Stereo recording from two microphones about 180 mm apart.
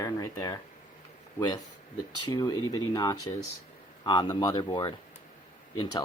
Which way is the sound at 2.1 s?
25° left (ahead or behind).